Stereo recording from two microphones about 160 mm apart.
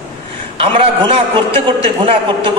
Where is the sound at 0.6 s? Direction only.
35° right (ahead or behind).